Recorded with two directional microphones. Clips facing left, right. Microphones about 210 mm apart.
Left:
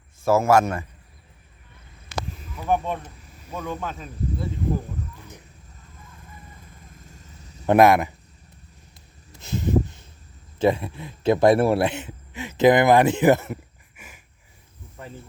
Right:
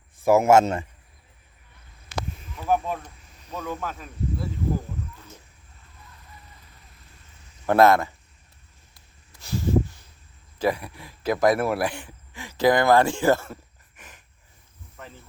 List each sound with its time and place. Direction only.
0.2 s a man's voice: 15° right (ahead or behind)
2.6 s speech: 5° right (ahead or behind)
6.6 s vehicle: 45° left (ahead or behind)
7.7 s speech: 15° left (ahead or behind)
9.3 s a sound: 20° left (ahead or behind)
10.6 s speech: 25° left (ahead or behind); by 14.2 s 10° left (ahead or behind)